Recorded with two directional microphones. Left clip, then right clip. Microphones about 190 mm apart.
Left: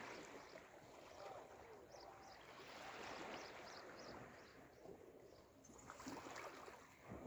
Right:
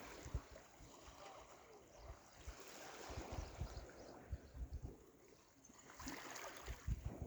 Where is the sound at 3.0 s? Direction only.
45° right (ahead or behind).